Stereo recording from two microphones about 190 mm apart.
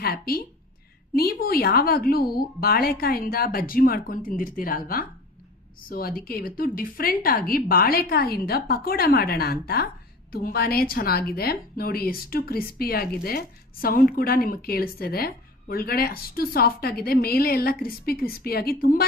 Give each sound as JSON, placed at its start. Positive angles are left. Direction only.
{"t": 0.0, "sound": "a woman's voice", "side_deg": 50}